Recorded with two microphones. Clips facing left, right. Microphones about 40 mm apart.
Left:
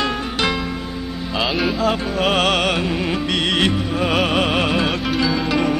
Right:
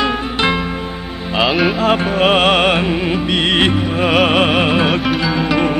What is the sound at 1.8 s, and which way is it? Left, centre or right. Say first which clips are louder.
Music: right 5 dB; right.